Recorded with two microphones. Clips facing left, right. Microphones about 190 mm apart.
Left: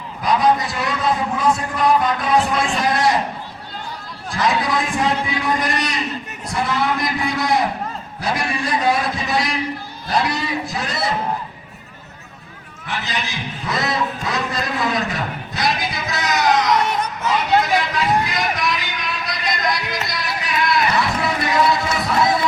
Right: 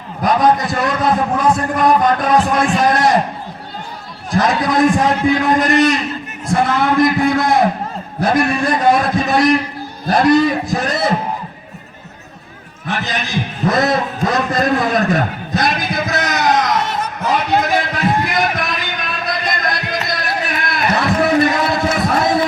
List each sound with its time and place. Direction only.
0.2 s a man's voice: 45° right (ahead or behind)
4.4 s a man's voice: 50° right (ahead or behind)
12.9 s a man's voice: 50° right (ahead or behind)
17.2 s a sound: 55° right (ahead or behind)